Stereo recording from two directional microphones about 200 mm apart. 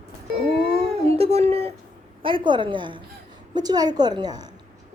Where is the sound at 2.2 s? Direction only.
25° right (ahead or behind).